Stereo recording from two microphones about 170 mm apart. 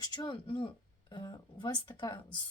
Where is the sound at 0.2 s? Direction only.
30° left (ahead or behind).